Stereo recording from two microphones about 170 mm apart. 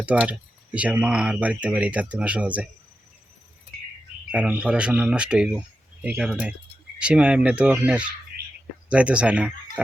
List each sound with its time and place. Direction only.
0.0 s speech: 5° right (ahead or behind)
4.3 s speech: 10° right (ahead or behind)